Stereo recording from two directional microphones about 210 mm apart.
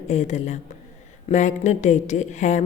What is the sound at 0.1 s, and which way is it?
A woman's voice, 35° left (ahead or behind).